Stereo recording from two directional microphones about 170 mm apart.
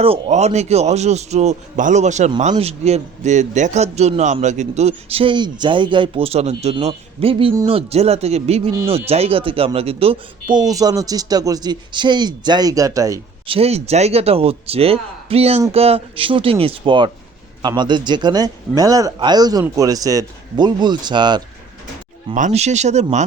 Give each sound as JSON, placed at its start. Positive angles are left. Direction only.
{"t": 0.0, "sound": "a man's voice", "side_deg": -40}
{"t": 13.5, "sound": "a man's voice", "side_deg": -35}
{"t": 22.4, "sound": "a man's voice", "side_deg": -45}